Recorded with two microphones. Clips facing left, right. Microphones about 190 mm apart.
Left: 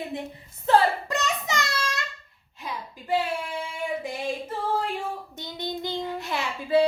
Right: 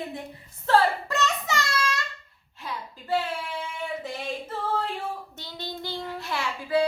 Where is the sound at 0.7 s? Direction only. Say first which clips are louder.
Left 1 dB; 15° left (ahead or behind).